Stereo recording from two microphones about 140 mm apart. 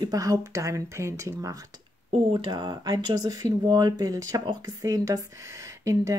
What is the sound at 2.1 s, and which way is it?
Speech, 35° right (ahead or behind).